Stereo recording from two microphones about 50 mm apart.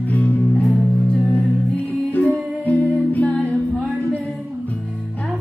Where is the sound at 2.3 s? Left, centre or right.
Right.